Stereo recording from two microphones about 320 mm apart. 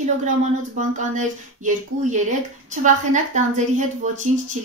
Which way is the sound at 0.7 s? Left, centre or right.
Right.